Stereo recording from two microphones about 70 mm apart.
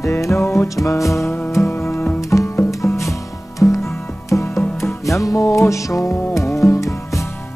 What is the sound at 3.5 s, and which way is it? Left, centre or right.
Music, left.